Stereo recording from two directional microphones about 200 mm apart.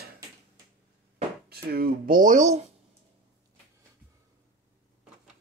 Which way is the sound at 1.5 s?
50° right (ahead or behind).